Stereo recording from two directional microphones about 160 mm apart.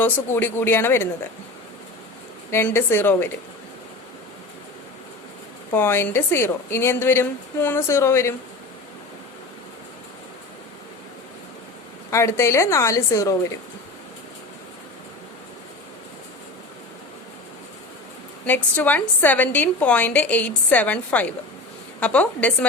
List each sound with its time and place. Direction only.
0.3 s a woman's voice: 15° left (ahead or behind)
2.5 s a woman's voice: 15° left (ahead or behind)
5.7 s a woman's voice: 15° left (ahead or behind)
12.1 s a woman's voice: 15° left (ahead or behind)
18.4 s a woman's voice: 10° left (ahead or behind)